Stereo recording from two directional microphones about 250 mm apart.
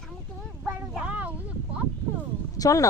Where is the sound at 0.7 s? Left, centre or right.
Centre.